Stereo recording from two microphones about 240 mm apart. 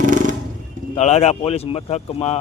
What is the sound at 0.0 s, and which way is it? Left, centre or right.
Music, right.